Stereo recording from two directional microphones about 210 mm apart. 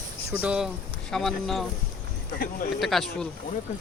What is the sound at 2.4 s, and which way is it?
Speech, 45° left (ahead or behind).